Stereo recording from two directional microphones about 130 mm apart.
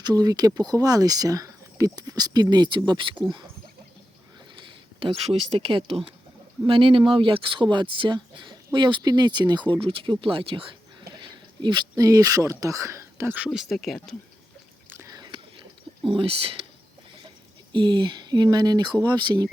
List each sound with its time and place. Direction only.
0.0 s speech: 30° right (ahead or behind)
4.5 s speech: 40° right (ahead or behind); by 14.2 s centre (ahead or behind)
15.1 s whispering: 35° right (ahead or behind)
16.0 s speech: 45° right (ahead or behind)
17.7 s speech: 40° right (ahead or behind)